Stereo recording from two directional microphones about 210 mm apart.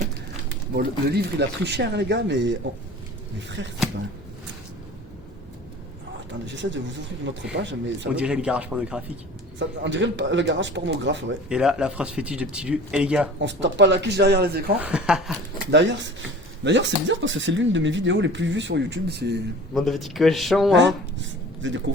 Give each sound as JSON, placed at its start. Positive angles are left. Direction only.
{"t": 0.8, "sound": "speech", "side_deg": -50}
{"t": 3.6, "sound": "speech", "side_deg": -60}
{"t": 6.4, "sound": "speech", "side_deg": -60}
{"t": 8.1, "sound": "speech", "side_deg": -5}
{"t": 9.6, "sound": "speech", "side_deg": -60}
{"t": 11.4, "sound": "speech", "side_deg": -5}
{"t": 13.4, "sound": "speech", "side_deg": -55}
{"t": 14.8, "sound": "speech", "side_deg": -5}
{"t": 15.7, "sound": "speech", "side_deg": -55}
{"t": 19.7, "sound": "speech", "side_deg": 0}
{"t": 20.7, "sound": "a sound", "side_deg": -60}